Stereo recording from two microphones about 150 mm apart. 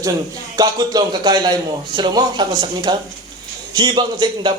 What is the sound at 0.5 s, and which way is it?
A man's voice, 25° right (ahead or behind).